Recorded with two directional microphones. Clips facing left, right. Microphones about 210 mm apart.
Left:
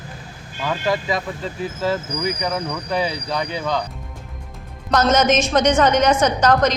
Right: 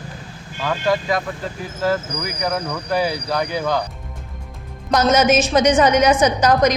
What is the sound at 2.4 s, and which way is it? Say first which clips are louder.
Speech: right 1 dB; 5° right (ahead or behind).